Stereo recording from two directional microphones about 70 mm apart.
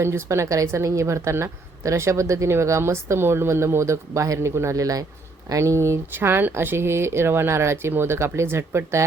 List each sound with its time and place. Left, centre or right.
0.0 s a woman's voice: right